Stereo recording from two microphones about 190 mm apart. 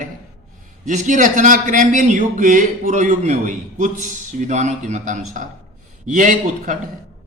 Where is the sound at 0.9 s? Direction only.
40° right (ahead or behind).